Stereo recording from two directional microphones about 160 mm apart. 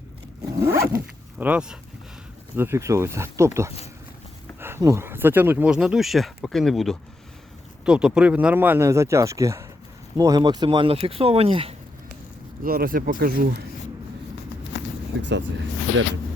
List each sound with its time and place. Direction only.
0.6 s dog: 15° right (ahead or behind)
2.6 s speech: 15° right (ahead or behind); by 11.7 s 35° right (ahead or behind)
12.6 s speech: 65° right (ahead or behind)
14.8 s a sound: 90° left
15.2 s speech: 90° right